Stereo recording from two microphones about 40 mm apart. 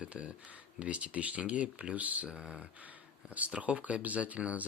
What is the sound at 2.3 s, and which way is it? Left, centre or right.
Speech, right.